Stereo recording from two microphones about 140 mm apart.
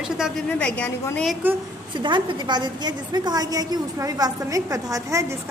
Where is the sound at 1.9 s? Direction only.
35° right (ahead or behind).